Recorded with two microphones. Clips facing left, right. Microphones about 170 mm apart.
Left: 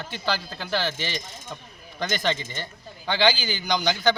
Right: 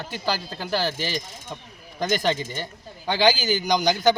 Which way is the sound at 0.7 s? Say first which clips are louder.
Right 2 dB; 40° right (ahead or behind).